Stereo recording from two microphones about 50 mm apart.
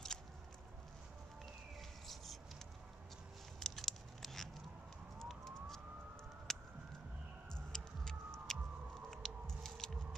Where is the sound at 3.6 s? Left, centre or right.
Centre.